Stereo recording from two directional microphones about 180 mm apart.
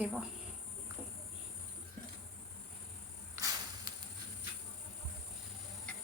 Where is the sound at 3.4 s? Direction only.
20° right (ahead or behind).